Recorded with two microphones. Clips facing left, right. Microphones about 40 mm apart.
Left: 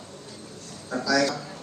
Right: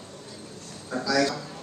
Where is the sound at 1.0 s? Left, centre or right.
Centre.